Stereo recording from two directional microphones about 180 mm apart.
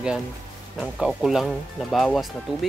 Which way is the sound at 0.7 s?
Centre (ahead or behind).